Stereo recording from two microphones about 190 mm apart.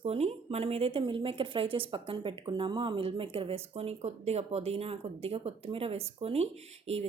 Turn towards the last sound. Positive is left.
turn(degrees=-35)  # may be behind; listen again after turning